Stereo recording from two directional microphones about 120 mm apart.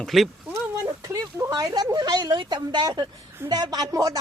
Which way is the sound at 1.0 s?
30° right (ahead or behind).